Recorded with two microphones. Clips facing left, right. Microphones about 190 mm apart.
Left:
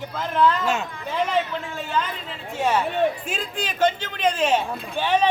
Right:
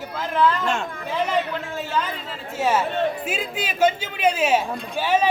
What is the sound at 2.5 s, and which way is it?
A man's voice, 5° right (ahead or behind).